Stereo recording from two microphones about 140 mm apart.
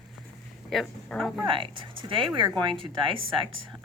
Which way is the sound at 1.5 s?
40° right (ahead or behind).